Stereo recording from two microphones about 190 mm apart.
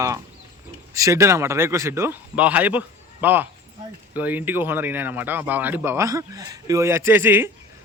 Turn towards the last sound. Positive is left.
turn(degrees=-10)  # may be behind; listen again after turning